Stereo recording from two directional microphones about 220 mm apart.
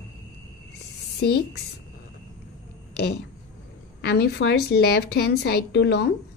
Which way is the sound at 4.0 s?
50° left (ahead or behind).